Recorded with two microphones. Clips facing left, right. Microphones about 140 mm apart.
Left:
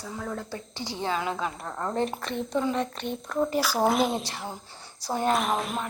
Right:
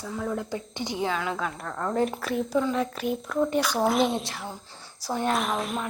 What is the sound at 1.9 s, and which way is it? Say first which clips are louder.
A woman's voice: right 4 dB; 5° right (ahead or behind).